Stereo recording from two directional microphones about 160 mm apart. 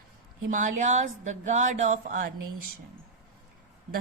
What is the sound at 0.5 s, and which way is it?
Speech, 50° right (ahead or behind).